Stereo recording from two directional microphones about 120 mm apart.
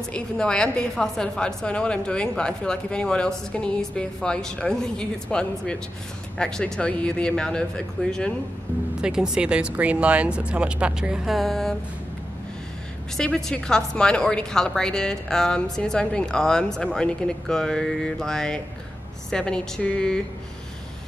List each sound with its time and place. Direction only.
0.1 s a woman's voice: 5° left (ahead or behind)
9.0 s speech: 5° right (ahead or behind)
13.2 s a woman's voice: 5° left (ahead or behind)